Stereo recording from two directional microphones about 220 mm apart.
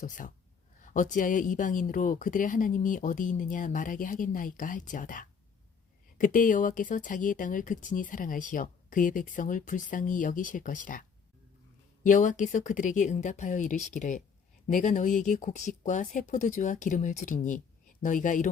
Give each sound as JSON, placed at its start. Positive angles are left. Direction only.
{"t": 0.0, "sound": "speech", "side_deg": 35}
{"t": 12.0, "sound": "speech", "side_deg": 35}